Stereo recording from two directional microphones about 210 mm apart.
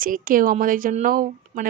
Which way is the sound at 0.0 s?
40° right (ahead or behind).